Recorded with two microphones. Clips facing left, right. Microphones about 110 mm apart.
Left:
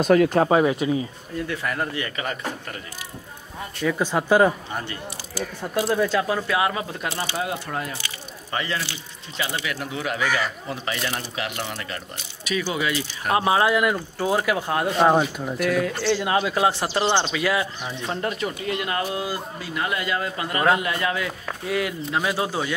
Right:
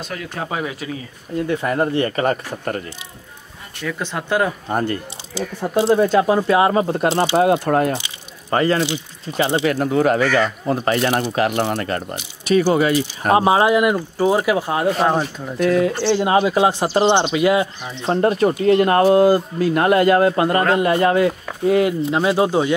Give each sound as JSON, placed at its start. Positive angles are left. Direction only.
{"t": 0.0, "sound": "speech", "side_deg": 45}
{"t": 1.5, "sound": "speech", "side_deg": -30}
{"t": 3.8, "sound": "speech", "side_deg": 5}
{"t": 4.6, "sound": "speech", "side_deg": -45}
{"t": 5.6, "sound": "speech", "side_deg": -30}
{"t": 7.3, "sound": "speech", "side_deg": -50}
{"t": 8.8, "sound": "speech", "side_deg": -25}
{"t": 9.7, "sound": "speech", "side_deg": -45}
{"t": 13.5, "sound": "speech", "side_deg": -20}
{"t": 15.0, "sound": "speech", "side_deg": 0}
{"t": 15.7, "sound": "speech", "side_deg": -25}
{"t": 18.1, "sound": "speech", "side_deg": -40}